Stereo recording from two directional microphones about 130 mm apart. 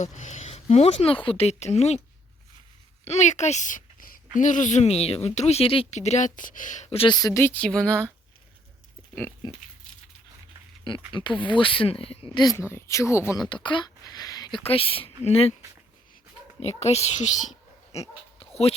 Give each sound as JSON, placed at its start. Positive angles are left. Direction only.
{"t": 0.0, "sound": "a woman's voice", "side_deg": 70}
{"t": 3.0, "sound": "speech", "side_deg": 60}
{"t": 4.4, "sound": "a woman's voice", "side_deg": 75}
{"t": 7.1, "sound": "speech", "side_deg": 30}
{"t": 9.4, "sound": "speech", "side_deg": 35}
{"t": 11.1, "sound": "speech", "side_deg": 40}
{"t": 12.5, "sound": "speech", "side_deg": 20}
{"t": 13.5, "sound": "a sound", "side_deg": 40}
{"t": 14.6, "sound": "speech", "side_deg": 45}
{"t": 16.6, "sound": "a woman's voice", "side_deg": 55}
{"t": 17.9, "sound": "speech", "side_deg": 55}
{"t": 18.3, "sound": "dog", "side_deg": 50}